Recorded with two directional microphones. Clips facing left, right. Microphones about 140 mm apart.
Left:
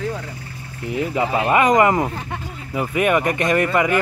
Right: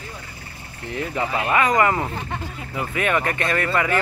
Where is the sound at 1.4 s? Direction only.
20° left (ahead or behind).